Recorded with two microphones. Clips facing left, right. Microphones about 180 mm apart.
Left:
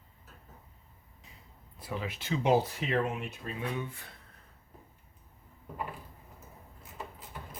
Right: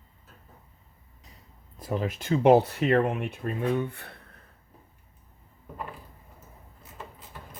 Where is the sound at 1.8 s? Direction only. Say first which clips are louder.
Right 7 dB; 45° right (ahead or behind); by 4.2 s 60° right (ahead or behind).